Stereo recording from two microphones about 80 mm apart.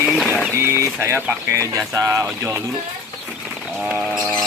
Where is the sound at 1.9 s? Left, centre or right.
Right.